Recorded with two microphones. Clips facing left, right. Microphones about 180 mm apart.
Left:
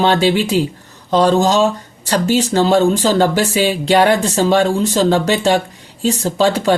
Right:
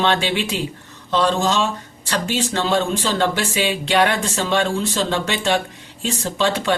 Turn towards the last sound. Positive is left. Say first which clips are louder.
# left 6 dB
turn(degrees=40)  # may be behind; listen again after turning